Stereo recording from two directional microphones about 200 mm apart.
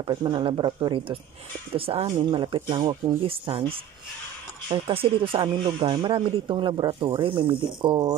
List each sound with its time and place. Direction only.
0.0 s speech: 25° right (ahead or behind)